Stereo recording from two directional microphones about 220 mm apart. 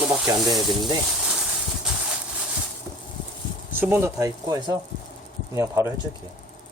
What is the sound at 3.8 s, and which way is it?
Speech, 10° right (ahead or behind).